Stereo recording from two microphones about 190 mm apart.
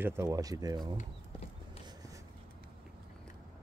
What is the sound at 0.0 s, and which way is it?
Speech, 15° right (ahead or behind).